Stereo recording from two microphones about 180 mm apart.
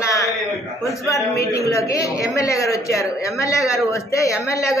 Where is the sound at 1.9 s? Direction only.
20° left (ahead or behind).